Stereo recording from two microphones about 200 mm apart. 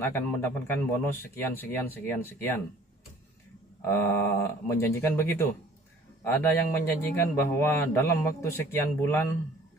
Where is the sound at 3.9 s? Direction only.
10° left (ahead or behind).